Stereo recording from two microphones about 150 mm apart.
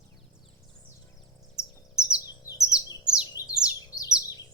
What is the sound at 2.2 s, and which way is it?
Bird, 20° left (ahead or behind).